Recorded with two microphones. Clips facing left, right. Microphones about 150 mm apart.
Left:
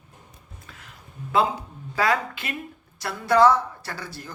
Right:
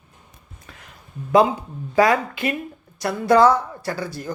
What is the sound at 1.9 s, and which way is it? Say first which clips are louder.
Speech: right 6 dB; 20° right (ahead or behind).